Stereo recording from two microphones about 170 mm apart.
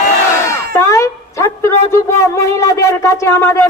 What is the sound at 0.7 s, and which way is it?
A woman's voice, 15° left (ahead or behind).